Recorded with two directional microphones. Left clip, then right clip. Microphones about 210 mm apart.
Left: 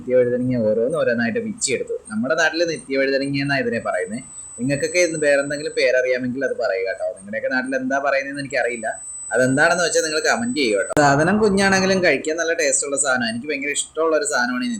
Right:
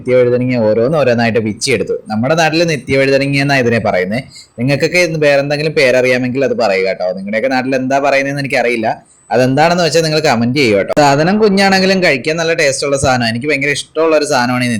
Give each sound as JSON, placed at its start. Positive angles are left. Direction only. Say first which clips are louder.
{"t": 0.1, "sound": "speech", "louder": "right 7 dB", "side_deg": -25}